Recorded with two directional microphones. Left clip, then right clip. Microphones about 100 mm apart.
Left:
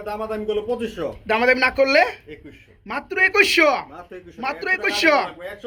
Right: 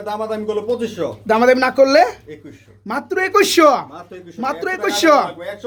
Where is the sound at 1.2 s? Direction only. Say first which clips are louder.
Right 4 dB; 35° right (ahead or behind).